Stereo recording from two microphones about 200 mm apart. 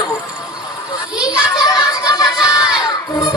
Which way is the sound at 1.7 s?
20° left (ahead or behind).